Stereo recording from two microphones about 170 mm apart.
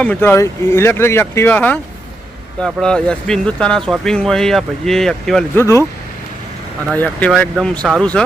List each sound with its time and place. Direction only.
0.0 s speech: 10° left (ahead or behind)
5.5 s speech: 15° left (ahead or behind)
6.9 s speech: 10° left (ahead or behind)